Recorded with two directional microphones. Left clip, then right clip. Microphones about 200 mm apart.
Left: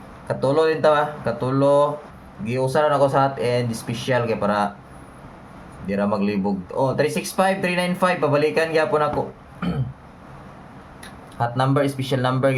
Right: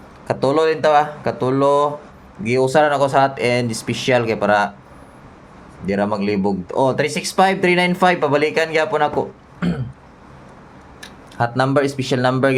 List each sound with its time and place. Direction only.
0.3 s speech: 35° right (ahead or behind)
5.8 s speech: 40° right (ahead or behind)
11.3 s speech: 35° right (ahead or behind)